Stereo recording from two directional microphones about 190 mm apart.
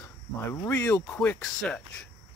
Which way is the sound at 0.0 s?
15° left (ahead or behind).